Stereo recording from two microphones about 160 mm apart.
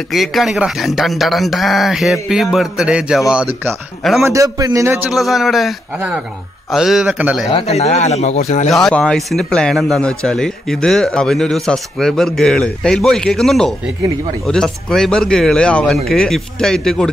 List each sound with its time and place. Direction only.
0.1 s a man's voice: centre (ahead or behind)
4.2 s a man's voice: 20° right (ahead or behind)
5.1 s a man's voice: centre (ahead or behind)
7.5 s speech: 45° left (ahead or behind)
8.6 s a man's voice: centre (ahead or behind)